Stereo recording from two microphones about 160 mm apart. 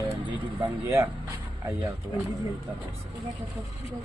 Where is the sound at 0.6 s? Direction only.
15° right (ahead or behind).